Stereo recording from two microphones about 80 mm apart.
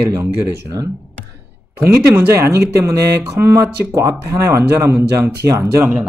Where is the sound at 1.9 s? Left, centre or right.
Right.